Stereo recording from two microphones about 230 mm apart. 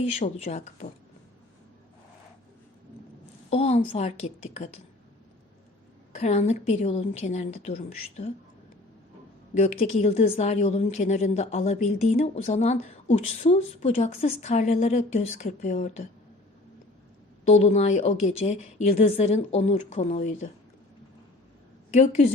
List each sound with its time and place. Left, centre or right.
0.0 s a woman's voice: left
3.5 s a woman's voice: left
6.1 s a woman's voice: left
9.6 s a woman's voice: left
17.4 s a woman's voice: left
21.9 s a woman's voice: left